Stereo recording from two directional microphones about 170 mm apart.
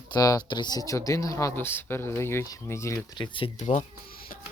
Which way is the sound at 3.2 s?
30° left (ahead or behind).